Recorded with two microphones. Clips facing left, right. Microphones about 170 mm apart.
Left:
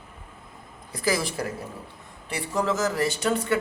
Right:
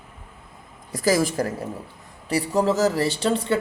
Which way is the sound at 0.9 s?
40° right (ahead or behind).